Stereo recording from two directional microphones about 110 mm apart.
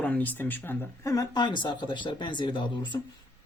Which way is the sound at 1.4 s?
45° left (ahead or behind).